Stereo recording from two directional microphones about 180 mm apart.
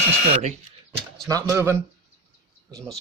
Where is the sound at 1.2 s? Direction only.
15° right (ahead or behind).